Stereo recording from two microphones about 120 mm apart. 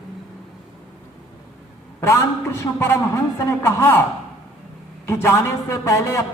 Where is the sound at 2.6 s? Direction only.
25° left (ahead or behind).